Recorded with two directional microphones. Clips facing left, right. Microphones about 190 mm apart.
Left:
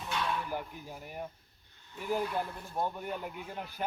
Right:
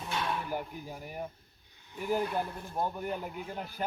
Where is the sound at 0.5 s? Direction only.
5° right (ahead or behind).